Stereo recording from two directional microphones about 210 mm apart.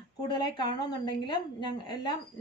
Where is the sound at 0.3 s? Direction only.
20° left (ahead or behind).